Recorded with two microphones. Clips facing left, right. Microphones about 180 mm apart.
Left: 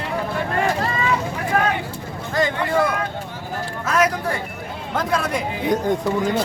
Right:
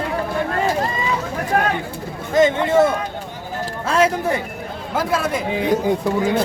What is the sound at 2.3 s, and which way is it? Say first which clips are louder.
Speech: right 6 dB; 20° right (ahead or behind).